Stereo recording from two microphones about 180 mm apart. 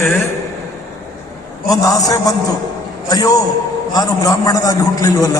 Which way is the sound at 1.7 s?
20° left (ahead or behind).